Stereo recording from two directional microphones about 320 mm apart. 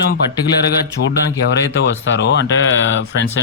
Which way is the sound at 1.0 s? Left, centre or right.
Left.